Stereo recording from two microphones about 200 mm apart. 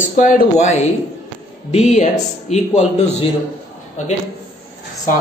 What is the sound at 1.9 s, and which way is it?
Speech, 35° left (ahead or behind).